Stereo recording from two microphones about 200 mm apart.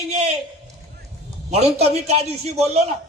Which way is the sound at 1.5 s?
30° right (ahead or behind).